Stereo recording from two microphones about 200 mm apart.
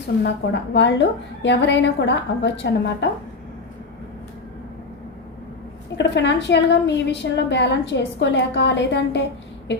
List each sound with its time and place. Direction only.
0.2 s a woman's voice: 60° left (ahead or behind)
6.0 s a woman's voice: 60° left (ahead or behind)